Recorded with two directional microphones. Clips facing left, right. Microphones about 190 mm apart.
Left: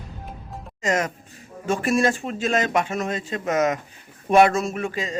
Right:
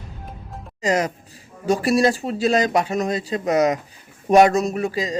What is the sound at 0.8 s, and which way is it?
A man's voice, 35° right (ahead or behind).